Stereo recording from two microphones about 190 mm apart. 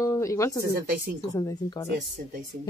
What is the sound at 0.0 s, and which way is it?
Speech, 15° left (ahead or behind).